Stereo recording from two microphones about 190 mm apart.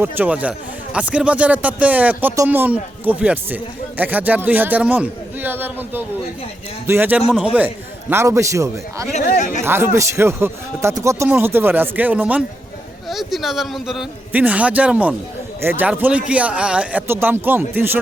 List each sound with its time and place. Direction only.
0.0 s speech: 10° right (ahead or behind)
9.2 s speech: 50° left (ahead or behind)
9.6 s a man's voice: 10° right (ahead or behind)